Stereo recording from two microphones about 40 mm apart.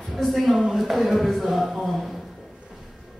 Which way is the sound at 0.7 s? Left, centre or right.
Centre.